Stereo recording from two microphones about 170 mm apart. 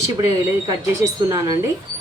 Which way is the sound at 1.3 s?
20° right (ahead or behind).